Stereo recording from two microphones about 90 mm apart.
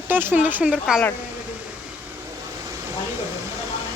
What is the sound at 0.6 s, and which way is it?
Speech, 10° right (ahead or behind).